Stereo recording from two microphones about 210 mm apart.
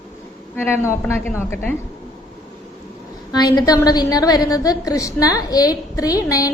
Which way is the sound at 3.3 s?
20° left (ahead or behind).